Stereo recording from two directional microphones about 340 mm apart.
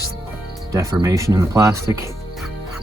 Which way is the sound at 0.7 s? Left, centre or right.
Centre.